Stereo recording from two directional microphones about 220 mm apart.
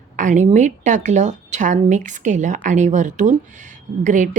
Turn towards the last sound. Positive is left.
turn(degrees=-35)  # may be behind; listen again after turning